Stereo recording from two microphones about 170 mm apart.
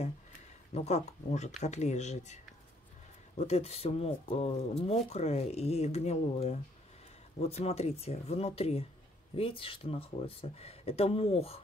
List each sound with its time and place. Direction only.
0.7 s speech: 40° left (ahead or behind)